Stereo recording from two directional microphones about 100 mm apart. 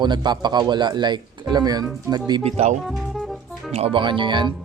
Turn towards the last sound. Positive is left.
turn(degrees=-50)  # may be behind; listen again after turning